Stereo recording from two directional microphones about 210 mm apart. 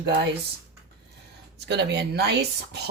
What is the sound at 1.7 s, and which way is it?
Speech, 55° right (ahead or behind).